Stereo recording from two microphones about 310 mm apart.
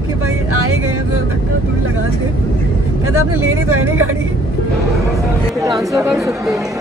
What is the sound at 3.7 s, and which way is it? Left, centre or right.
Speech, right.